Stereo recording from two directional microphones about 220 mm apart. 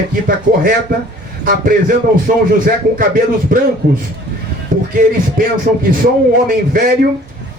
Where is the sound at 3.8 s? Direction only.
50° right (ahead or behind).